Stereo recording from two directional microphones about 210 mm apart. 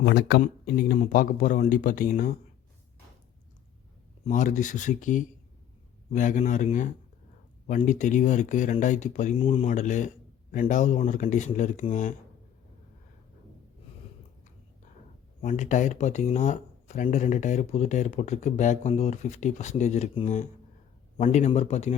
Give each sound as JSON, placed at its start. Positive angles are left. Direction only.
{"t": 0.0, "sound": "speech", "side_deg": 50}
{"t": 4.3, "sound": "speech", "side_deg": 40}
{"t": 15.4, "sound": "speech", "side_deg": 35}